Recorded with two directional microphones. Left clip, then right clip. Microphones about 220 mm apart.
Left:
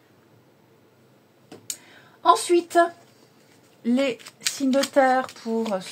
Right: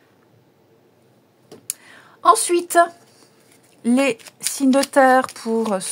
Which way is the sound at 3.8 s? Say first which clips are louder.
Right 5 dB; 40° right (ahead or behind).